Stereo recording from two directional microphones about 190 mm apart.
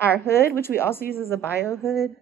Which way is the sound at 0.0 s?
10° left (ahead or behind).